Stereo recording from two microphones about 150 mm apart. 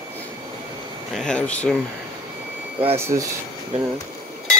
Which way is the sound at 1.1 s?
5° left (ahead or behind).